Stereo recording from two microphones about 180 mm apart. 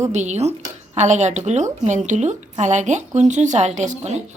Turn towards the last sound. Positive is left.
turn(degrees=-40)  # may be behind; listen again after turning